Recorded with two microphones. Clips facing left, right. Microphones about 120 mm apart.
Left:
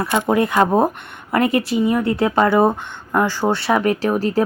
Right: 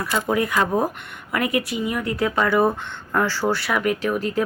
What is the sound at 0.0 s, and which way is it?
Speech, 25° left (ahead or behind).